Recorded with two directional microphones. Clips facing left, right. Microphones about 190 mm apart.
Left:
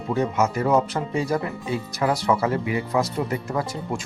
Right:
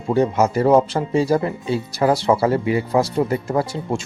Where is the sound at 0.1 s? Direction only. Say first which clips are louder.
Right 5 dB; 30° right (ahead or behind).